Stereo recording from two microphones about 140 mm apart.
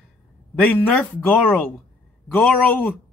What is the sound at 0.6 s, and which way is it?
Speech, 15° left (ahead or behind).